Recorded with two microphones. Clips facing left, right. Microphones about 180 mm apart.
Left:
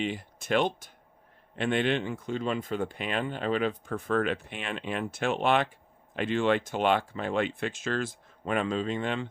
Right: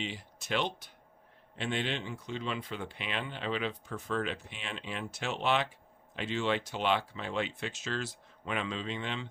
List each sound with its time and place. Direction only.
0.0 s speech: 55° left (ahead or behind)